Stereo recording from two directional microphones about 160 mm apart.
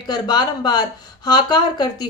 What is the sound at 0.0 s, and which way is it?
Speech, 25° left (ahead or behind).